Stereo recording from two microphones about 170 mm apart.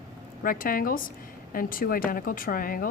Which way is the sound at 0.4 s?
55° left (ahead or behind).